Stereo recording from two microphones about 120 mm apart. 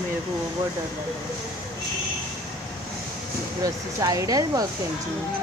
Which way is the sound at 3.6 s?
30° right (ahead or behind).